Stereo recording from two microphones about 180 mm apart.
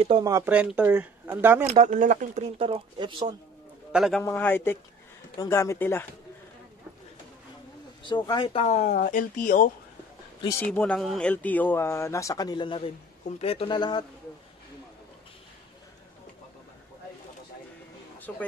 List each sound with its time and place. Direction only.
0.0 s speech: 30° right (ahead or behind)
0.3 s speech: 15° right (ahead or behind)
1.7 s speech: 45° right (ahead or behind)
2.6 s speech: 25° right (ahead or behind)
3.9 s a man's voice: centre (ahead or behind)
4.2 s speech: 10° left (ahead or behind)
8.0 s speech: 25° left (ahead or behind); by 9.7 s 45° left (ahead or behind)
10.6 s speech: 5° left (ahead or behind); by 14.0 s 25° left (ahead or behind)
18.3 s speech: 5° left (ahead or behind)